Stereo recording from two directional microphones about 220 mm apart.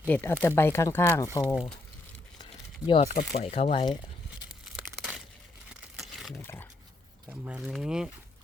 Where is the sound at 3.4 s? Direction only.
25° left (ahead or behind).